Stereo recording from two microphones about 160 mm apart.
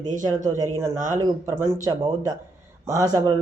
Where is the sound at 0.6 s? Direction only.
15° right (ahead or behind).